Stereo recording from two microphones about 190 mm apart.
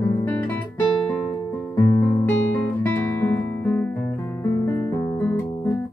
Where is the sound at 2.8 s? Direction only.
10° left (ahead or behind).